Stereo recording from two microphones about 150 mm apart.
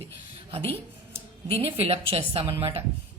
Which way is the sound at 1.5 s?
40° right (ahead or behind).